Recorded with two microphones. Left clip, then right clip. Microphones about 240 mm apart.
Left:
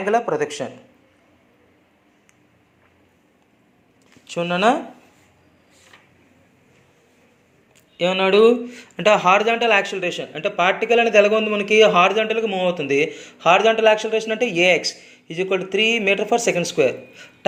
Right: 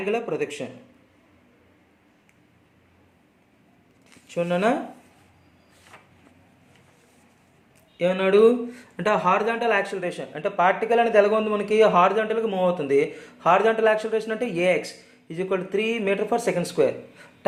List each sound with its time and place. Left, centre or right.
0.0 s speech: centre
4.4 s speech: centre
7.9 s speech: centre